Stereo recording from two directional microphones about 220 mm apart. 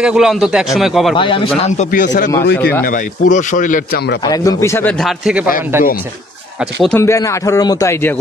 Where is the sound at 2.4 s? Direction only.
50° left (ahead or behind).